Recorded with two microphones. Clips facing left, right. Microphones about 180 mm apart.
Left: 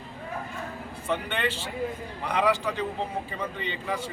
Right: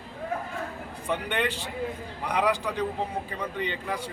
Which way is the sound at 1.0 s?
15° right (ahead or behind).